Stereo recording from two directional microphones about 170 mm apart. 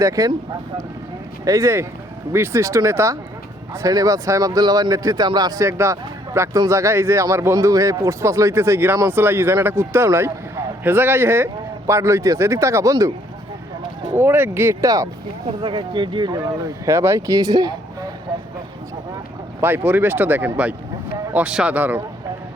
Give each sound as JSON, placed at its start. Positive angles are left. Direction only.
{"t": 0.0, "sound": "speech", "side_deg": -20}
{"t": 1.5, "sound": "speech", "side_deg": -20}
{"t": 14.1, "sound": "speech", "side_deg": -15}
{"t": 16.8, "sound": "speech", "side_deg": -15}
{"t": 19.6, "sound": "speech", "side_deg": -10}